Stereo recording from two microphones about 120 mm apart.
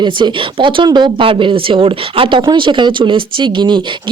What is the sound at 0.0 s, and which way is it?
Speech, 40° right (ahead or behind).